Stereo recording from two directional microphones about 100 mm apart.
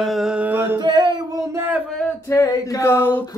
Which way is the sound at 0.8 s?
50° right (ahead or behind).